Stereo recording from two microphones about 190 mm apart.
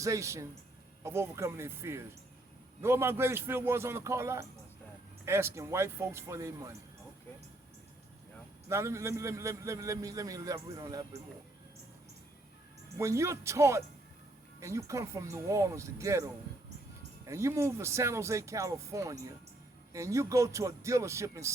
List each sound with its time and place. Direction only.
0.0 s a man's voice: 15° right (ahead or behind)
8.7 s a man's voice: 15° right (ahead or behind)
13.0 s a man's voice: 15° right (ahead or behind)